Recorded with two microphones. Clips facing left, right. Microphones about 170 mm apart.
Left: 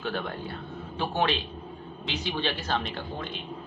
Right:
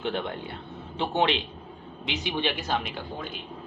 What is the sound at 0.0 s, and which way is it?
Speech, 20° right (ahead or behind).